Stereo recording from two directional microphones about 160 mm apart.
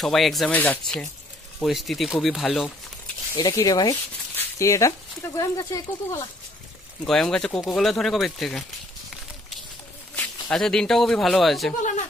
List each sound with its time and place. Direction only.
0.0 s speech: centre (ahead or behind)
3.3 s speech: 25° left (ahead or behind)
7.1 s speech: 5° left (ahead or behind)
10.1 s speech: 5° left (ahead or behind)